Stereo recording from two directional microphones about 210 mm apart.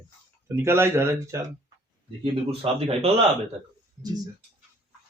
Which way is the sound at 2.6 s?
25° right (ahead or behind).